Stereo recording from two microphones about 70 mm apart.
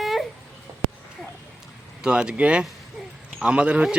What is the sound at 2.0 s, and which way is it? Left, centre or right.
A man's voice, centre.